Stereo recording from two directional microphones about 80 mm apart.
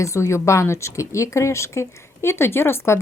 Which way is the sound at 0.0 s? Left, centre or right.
Left.